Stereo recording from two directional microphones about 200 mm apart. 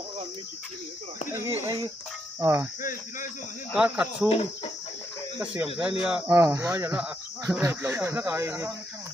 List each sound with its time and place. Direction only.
1.3 s speech: 15° right (ahead or behind)
2.8 s speech: 40° left (ahead or behind)
3.7 s speech: 5° right (ahead or behind)
5.4 s speech: 5° right (ahead or behind)